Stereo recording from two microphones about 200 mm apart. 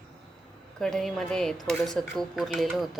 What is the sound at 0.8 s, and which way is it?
Speech, centre (ahead or behind).